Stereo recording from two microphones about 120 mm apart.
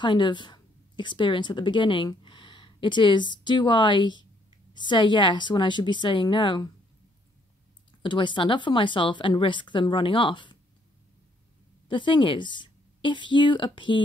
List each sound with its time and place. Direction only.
0.0 s speech: 40° left (ahead or behind)
8.0 s speech: 40° left (ahead or behind)
11.9 s speech: 40° left (ahead or behind)